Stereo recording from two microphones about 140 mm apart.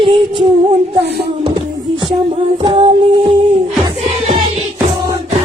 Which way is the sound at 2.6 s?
35° right (ahead or behind).